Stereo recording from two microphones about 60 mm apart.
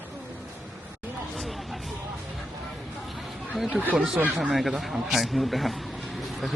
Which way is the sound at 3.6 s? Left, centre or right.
Centre.